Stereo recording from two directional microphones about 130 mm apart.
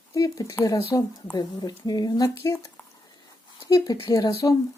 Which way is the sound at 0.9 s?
25° left (ahead or behind).